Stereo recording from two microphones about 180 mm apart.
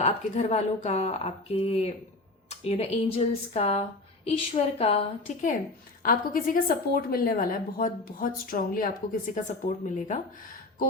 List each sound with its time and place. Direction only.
0.0 s a woman's voice: 35° left (ahead or behind)
6.0 s a woman's voice: 50° left (ahead or behind)